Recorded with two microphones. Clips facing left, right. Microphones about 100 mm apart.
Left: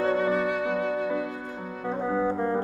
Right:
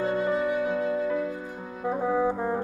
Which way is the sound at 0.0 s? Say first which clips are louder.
Left 1 dB; 70° left (ahead or behind).